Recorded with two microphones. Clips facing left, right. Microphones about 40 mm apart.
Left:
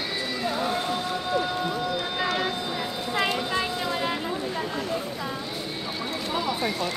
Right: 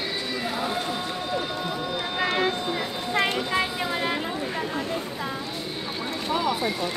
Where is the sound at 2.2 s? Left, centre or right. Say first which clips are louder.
Right 4 dB; right.